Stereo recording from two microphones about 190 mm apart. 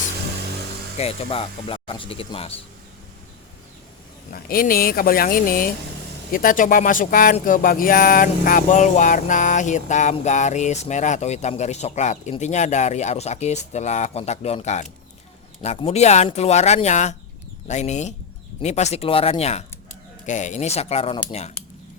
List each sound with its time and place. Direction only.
0.9 s speech: 30° left (ahead or behind)
4.3 s speech: 50° left (ahead or behind)
7.3 s a sound: 45° left (ahead or behind)